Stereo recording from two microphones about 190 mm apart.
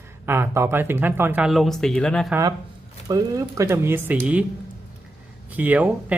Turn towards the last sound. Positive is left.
turn(degrees=-10)  # may be behind; listen again after turning